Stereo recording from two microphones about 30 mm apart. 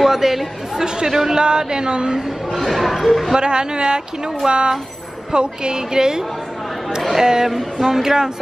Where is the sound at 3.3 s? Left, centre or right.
Right.